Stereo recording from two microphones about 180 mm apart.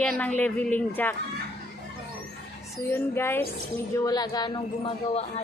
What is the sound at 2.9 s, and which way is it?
A woman's voice, 10° left (ahead or behind).